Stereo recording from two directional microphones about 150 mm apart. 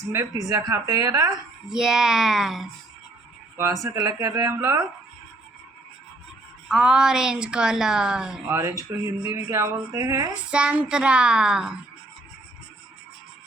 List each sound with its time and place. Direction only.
0.1 s speech: 20° right (ahead or behind)
1.6 s a woman's voice: 5° right (ahead or behind)
3.8 s speech: 20° right (ahead or behind)
6.7 s a woman's voice: 5° right (ahead or behind)
8.9 s a child's voice: 20° right (ahead or behind)
10.5 s a child's voice: 5° right (ahead or behind)